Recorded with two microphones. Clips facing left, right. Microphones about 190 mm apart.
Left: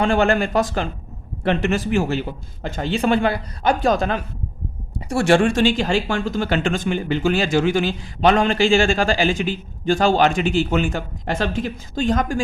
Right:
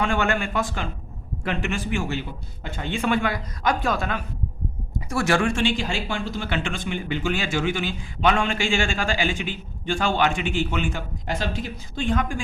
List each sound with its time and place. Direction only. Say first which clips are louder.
0.0 s speech: left 6 dB; 35° left (ahead or behind)